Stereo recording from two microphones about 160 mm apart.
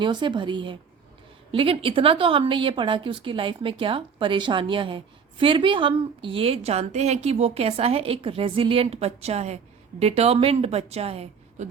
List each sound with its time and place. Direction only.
0.0 s a woman's voice: 30° right (ahead or behind)